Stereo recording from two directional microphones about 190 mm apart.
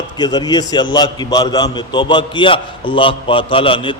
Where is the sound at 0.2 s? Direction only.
20° left (ahead or behind).